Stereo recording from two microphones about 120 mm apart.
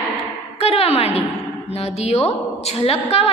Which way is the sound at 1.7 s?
60° left (ahead or behind).